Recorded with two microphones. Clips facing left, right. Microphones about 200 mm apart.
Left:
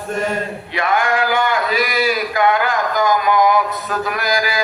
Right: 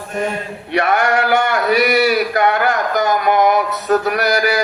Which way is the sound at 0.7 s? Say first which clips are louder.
Right 2 dB; 70° right (ahead or behind).